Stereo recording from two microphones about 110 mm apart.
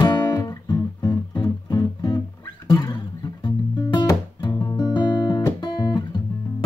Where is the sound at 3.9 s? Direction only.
45° left (ahead or behind).